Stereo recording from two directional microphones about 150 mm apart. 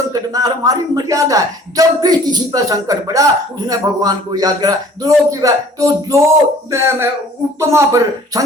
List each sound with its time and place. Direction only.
0.1 s speech: 25° right (ahead or behind)